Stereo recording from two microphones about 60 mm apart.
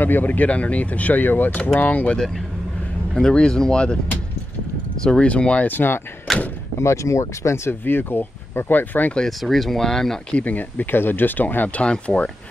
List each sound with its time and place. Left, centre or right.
0.0 s speech: left
2.1 s speech: centre
5.0 s speech: centre
5.7 s speech: left
6.8 s speech: left
7.8 s speech: left
9.4 s speech: centre
10.3 s speech: left